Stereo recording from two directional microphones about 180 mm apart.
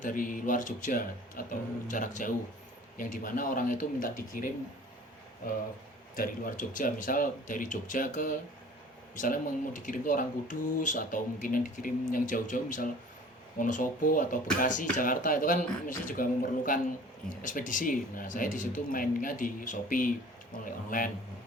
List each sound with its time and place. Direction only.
0.0 s speech: 50° left (ahead or behind)
6.1 s speech: 50° left (ahead or behind)